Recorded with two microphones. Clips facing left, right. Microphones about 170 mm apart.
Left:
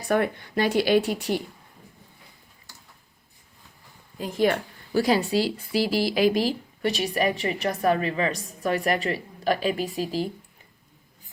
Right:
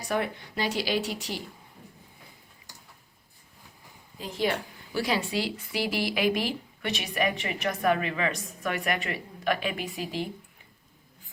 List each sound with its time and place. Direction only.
0.1 s speech: 55° left (ahead or behind)
2.7 s a sound: 15° right (ahead or behind)
4.2 s a woman's voice: 50° left (ahead or behind)